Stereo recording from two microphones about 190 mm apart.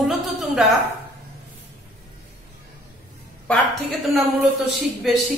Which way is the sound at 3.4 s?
5° left (ahead or behind).